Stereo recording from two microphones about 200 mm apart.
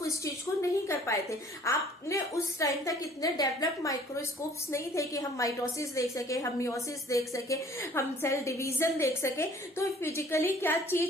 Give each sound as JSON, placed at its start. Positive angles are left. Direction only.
{"t": 0.9, "sound": "a woman's voice", "side_deg": 15}